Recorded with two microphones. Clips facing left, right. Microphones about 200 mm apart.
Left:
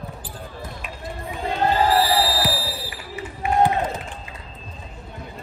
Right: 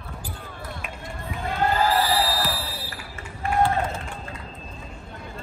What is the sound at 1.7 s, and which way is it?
Basketball bounce, 30° left (ahead or behind).